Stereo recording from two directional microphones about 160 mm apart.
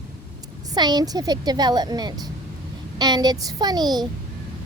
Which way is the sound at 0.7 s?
25° right (ahead or behind).